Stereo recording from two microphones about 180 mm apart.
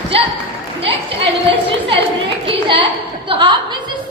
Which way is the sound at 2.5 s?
30° right (ahead or behind).